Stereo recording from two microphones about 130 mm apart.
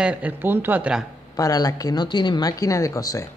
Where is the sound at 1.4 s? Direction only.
30° left (ahead or behind).